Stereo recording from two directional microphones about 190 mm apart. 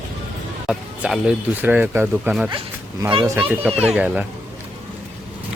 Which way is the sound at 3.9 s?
5° right (ahead or behind).